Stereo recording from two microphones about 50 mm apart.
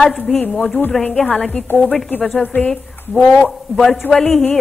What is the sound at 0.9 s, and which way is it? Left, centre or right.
Speech, left.